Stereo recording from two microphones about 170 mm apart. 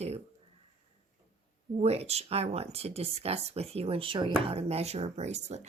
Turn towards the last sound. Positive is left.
turn(degrees=-40)  # may be behind; listen again after turning